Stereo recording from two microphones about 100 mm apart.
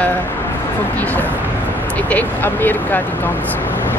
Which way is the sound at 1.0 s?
15° left (ahead or behind).